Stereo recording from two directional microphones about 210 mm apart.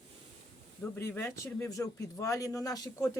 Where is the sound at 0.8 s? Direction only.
10° left (ahead or behind).